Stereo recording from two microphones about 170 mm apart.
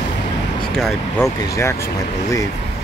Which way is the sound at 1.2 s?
15° left (ahead or behind).